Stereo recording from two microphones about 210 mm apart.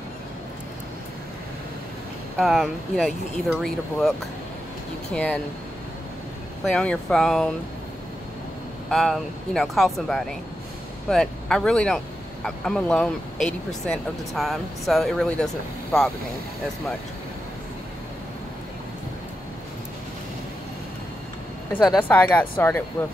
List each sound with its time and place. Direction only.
2.3 s speech: centre (ahead or behind)
5.1 s speech: 5° left (ahead or behind)
6.7 s speech: 5° left (ahead or behind)
8.9 s speech: centre (ahead or behind)
21.8 s speech: 5° left (ahead or behind)